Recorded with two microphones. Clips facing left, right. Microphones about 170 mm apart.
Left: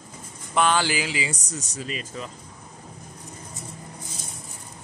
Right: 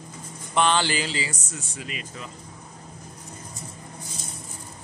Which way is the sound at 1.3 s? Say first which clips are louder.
Left 3 dB; 35° left (ahead or behind).